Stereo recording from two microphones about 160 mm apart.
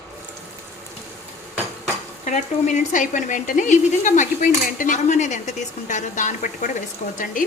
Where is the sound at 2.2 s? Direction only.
50° left (ahead or behind).